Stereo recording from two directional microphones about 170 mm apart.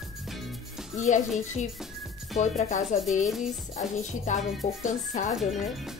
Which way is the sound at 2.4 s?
45° left (ahead or behind).